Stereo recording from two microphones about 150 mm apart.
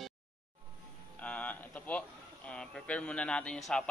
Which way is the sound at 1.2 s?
10° left (ahead or behind).